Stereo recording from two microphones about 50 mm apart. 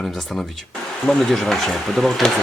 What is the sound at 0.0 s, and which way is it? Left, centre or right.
Speech, centre.